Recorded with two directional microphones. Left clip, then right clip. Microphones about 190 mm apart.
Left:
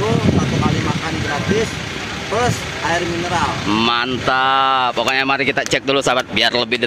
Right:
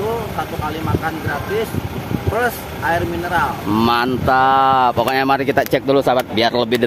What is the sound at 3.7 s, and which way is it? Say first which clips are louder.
Speech: right 1 dB; 20° right (ahead or behind).